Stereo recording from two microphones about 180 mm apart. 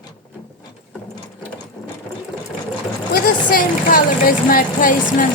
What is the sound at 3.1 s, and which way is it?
Speech, 50° left (ahead or behind).